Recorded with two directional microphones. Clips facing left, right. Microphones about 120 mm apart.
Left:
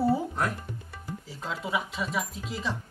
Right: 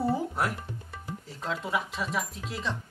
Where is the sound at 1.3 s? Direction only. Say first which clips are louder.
Right 1 dB; 5° left (ahead or behind).